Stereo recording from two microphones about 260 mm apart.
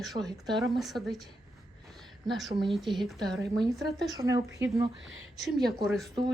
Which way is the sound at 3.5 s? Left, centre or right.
Centre.